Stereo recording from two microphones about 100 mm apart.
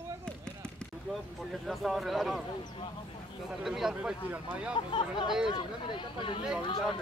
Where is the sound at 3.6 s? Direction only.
5° right (ahead or behind).